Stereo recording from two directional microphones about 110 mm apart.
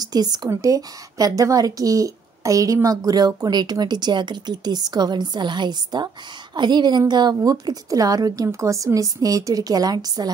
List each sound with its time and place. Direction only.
0.0 s a woman's voice: 40° right (ahead or behind)